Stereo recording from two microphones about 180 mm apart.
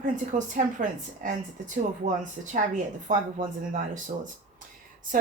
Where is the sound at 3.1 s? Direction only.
45° right (ahead or behind).